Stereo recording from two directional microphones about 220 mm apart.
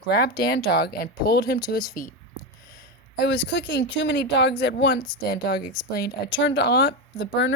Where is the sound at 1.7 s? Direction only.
15° left (ahead or behind).